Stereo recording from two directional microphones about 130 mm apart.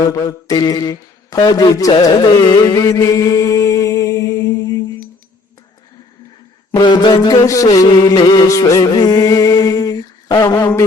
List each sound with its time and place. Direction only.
0.0 s mantra: 30° left (ahead or behind)
6.7 s music: 35° left (ahead or behind)